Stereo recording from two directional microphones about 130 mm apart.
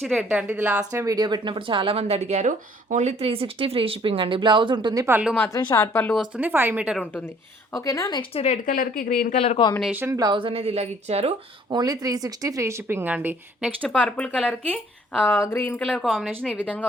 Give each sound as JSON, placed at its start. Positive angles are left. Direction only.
{"t": 0.0, "sound": "a woman's voice", "side_deg": 0}
{"t": 0.3, "sound": "speech", "side_deg": -10}
{"t": 0.9, "sound": "speech", "side_deg": -25}
{"t": 5.5, "sound": "speech", "side_deg": 25}
{"t": 6.1, "sound": "speech", "side_deg": -10}
{"t": 7.0, "sound": "speech", "side_deg": 15}
{"t": 7.8, "sound": "speech", "side_deg": 25}
{"t": 8.3, "sound": "speech", "side_deg": 50}
{"t": 8.6, "sound": "speech", "side_deg": 90}
{"t": 9.9, "sound": "a woman's voice", "side_deg": -20}
{"t": 10.3, "sound": "speech", "side_deg": -45}
{"t": 11.7, "sound": "a woman's voice", "side_deg": -30}
{"t": 13.8, "sound": "speech", "side_deg": 10}
{"t": 16.0, "sound": "a woman's voice", "side_deg": 5}